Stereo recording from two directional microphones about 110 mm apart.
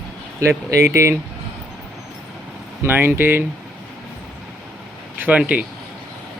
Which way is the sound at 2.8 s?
20° right (ahead or behind).